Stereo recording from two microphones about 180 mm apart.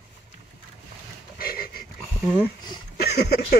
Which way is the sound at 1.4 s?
55° left (ahead or behind).